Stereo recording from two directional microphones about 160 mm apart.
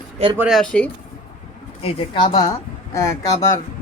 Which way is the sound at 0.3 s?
5° right (ahead or behind).